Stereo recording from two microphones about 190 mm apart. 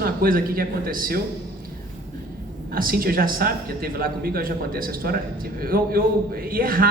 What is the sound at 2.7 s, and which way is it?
A man's voice, 50° right (ahead or behind).